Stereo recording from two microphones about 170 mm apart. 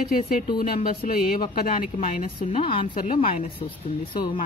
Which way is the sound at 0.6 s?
60° left (ahead or behind).